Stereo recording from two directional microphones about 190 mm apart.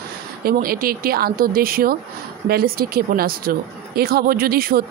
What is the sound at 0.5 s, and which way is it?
Speech, 50° right (ahead or behind).